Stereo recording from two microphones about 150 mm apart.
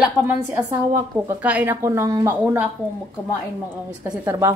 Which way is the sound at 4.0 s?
10° right (ahead or behind).